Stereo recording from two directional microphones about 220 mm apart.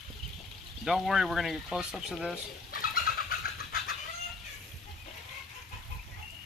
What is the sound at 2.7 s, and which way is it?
Bird, 40° left (ahead or behind).